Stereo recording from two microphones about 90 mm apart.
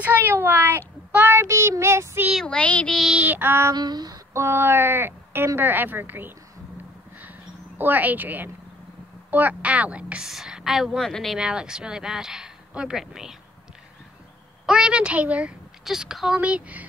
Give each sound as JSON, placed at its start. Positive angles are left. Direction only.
{"t": 0.0, "sound": "a child's voice", "side_deg": -20}
{"t": 2.4, "sound": "child singing", "side_deg": 10}
{"t": 2.9, "sound": "child singing", "side_deg": 0}
{"t": 3.2, "sound": "a child's voice", "side_deg": -20}
{"t": 3.7, "sound": "female singing", "side_deg": -50}
{"t": 4.3, "sound": "a child's voice", "side_deg": -30}
{"t": 7.2, "sound": "a sound", "side_deg": -20}
{"t": 9.3, "sound": "speech", "side_deg": -20}
{"t": 11.1, "sound": "child singing", "side_deg": 5}
{"t": 11.3, "sound": "speech", "side_deg": -10}
{"t": 14.7, "sound": "speech", "side_deg": -10}